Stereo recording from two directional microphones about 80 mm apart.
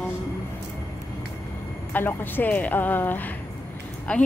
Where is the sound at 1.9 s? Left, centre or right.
Left.